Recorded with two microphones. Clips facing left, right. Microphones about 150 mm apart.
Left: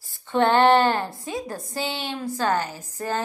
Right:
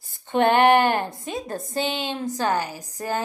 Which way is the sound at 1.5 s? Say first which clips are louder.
Right 2 dB; 55° right (ahead or behind).